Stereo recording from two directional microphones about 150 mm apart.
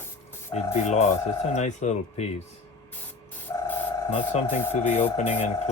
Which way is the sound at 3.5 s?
20° left (ahead or behind).